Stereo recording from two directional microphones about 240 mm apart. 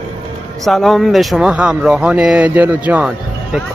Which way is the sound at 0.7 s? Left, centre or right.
Centre.